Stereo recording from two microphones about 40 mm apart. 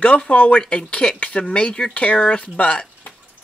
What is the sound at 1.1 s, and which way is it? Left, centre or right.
Speech, left.